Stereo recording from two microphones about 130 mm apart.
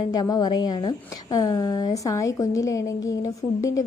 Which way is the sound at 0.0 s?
30° left (ahead or behind).